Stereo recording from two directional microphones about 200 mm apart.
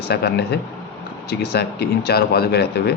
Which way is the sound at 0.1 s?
55° left (ahead or behind).